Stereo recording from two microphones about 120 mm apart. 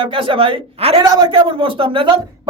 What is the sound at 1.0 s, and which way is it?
Speech, 30° right (ahead or behind).